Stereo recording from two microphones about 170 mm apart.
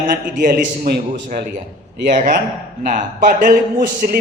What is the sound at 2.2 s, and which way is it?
A woman's voice, 50° right (ahead or behind).